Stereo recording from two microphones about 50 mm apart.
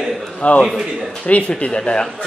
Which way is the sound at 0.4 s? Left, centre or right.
Left.